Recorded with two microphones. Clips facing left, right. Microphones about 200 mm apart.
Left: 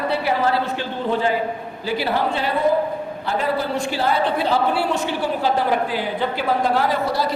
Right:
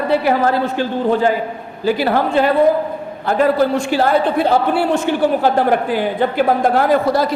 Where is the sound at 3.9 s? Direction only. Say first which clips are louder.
Right 4 dB; 50° right (ahead or behind).